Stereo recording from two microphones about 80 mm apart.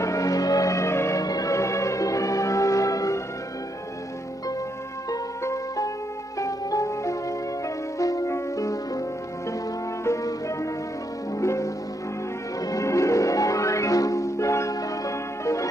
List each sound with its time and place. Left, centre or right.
0.0 s music: left
1.2 s music: left
5.4 s music: left
10.0 s music: left
12.7 s music: left